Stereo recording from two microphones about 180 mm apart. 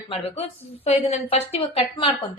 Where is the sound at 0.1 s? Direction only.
35° left (ahead or behind).